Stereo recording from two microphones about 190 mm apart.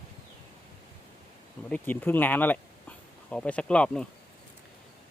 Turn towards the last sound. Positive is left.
turn(degrees=5)  # may be behind; listen again after turning